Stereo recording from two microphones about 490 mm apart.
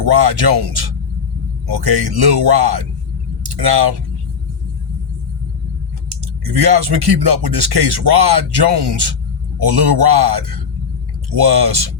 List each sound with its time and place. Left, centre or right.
0.0 s speech: right
6.1 s speech: right